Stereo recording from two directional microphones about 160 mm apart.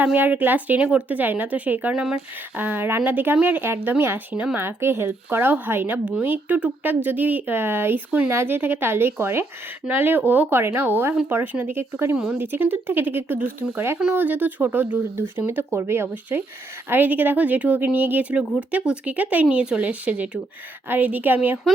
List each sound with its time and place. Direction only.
0.0 s speech: 10° right (ahead or behind)
12.1 s speech: centre (ahead or behind)